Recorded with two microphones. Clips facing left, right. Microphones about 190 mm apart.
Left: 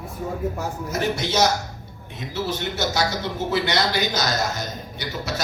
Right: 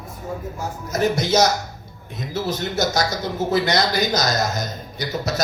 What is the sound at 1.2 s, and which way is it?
A man's voice, 40° right (ahead or behind).